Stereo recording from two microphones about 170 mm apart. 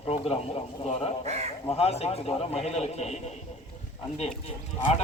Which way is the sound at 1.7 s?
35° left (ahead or behind).